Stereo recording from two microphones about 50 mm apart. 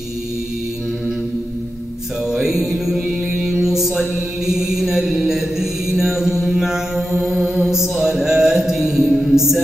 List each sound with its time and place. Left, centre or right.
2.2 s music: centre
3.3 s mantra: centre